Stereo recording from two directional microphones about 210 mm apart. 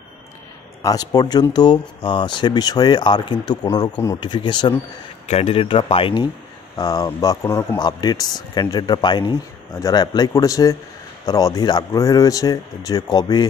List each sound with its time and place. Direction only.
0.8 s speech: 20° left (ahead or behind)